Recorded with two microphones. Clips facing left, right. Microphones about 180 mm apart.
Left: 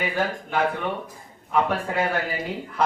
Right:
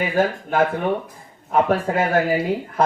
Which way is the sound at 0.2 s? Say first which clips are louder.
Right 7 dB; 45° right (ahead or behind).